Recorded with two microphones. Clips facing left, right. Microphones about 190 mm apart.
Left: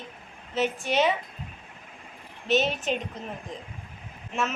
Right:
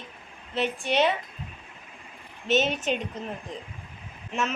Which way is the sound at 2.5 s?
Centre (ahead or behind).